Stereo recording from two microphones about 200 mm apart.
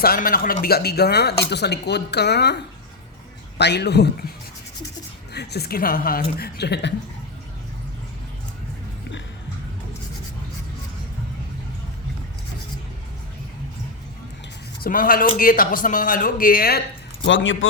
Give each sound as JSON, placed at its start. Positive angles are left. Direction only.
{"t": 0.0, "sound": "a woman's voice", "side_deg": 45}
{"t": 3.6, "sound": "a man's voice", "side_deg": 55}
{"t": 5.3, "sound": "a woman's voice", "side_deg": 55}
{"t": 14.8, "sound": "a woman's voice", "side_deg": 45}
{"t": 17.2, "sound": "speech", "side_deg": 70}